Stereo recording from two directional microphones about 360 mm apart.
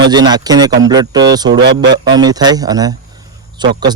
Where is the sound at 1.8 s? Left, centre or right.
Centre.